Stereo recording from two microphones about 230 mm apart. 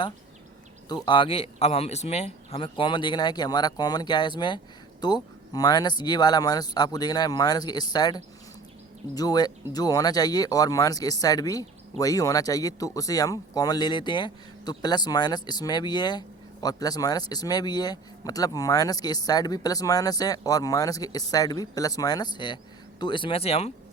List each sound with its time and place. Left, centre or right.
1.0 s speech: left